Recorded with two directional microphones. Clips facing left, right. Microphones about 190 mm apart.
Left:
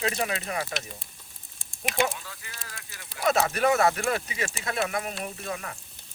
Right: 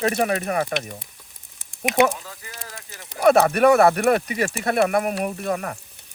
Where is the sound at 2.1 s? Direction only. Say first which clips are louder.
Right 6 dB; 40° right (ahead or behind).